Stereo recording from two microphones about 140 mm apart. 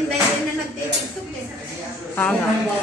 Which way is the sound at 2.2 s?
10° left (ahead or behind).